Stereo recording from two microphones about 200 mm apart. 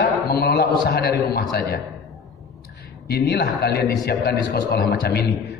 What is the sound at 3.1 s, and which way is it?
A man's voice, 55° left (ahead or behind).